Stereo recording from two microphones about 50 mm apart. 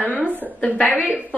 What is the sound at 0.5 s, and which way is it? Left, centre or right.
Speech, left.